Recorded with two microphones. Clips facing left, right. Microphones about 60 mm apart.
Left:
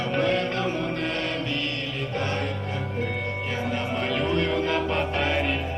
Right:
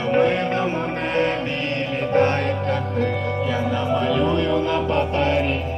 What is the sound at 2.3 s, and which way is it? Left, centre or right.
Music, right.